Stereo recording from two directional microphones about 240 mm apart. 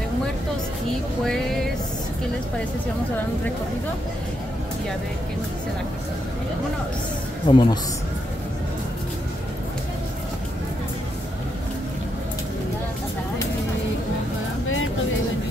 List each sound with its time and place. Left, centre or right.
1.2 s music: centre
7.4 s a man's voice: centre